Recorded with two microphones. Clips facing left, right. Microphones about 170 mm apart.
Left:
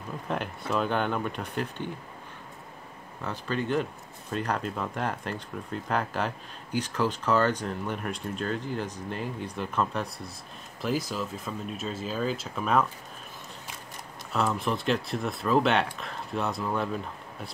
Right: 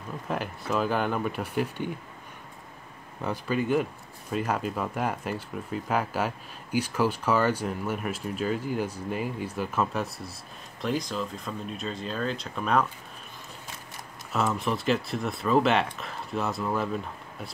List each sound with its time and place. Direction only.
0.3 s speech: centre (ahead or behind)
3.3 s speech: 10° right (ahead or behind)
14.3 s speech: centre (ahead or behind)